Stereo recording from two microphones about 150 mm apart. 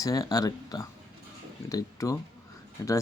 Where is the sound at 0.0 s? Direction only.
25° left (ahead or behind).